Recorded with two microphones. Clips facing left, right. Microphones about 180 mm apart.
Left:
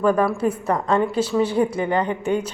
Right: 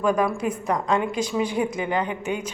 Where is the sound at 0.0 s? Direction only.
10° right (ahead or behind).